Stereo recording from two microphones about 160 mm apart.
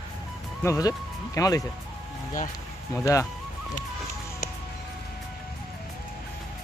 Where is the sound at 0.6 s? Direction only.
20° left (ahead or behind).